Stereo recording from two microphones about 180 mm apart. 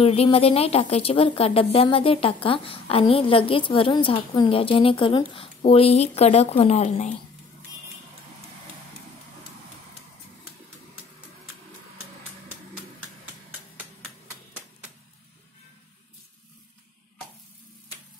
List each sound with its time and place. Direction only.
0.0 s a woman's voice: 35° left (ahead or behind)